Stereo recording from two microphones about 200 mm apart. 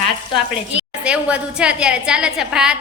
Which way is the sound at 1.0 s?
5° right (ahead or behind).